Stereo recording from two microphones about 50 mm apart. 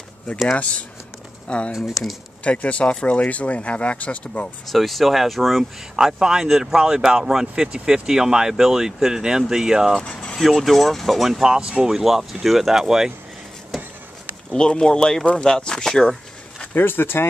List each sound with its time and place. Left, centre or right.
0.6 s speech: left
1.7 s speech: centre
2.4 s speech: left
4.6 s speech: centre
11.9 s speech: centre
14.5 s speech: centre
16.7 s speech: left